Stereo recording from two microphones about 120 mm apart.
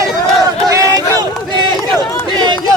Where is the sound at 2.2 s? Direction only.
35° right (ahead or behind).